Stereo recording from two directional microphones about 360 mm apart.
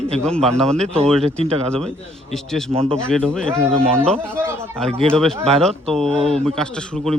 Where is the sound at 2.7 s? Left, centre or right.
Centre.